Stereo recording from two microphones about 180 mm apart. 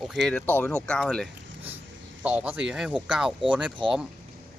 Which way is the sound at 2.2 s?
10° right (ahead or behind).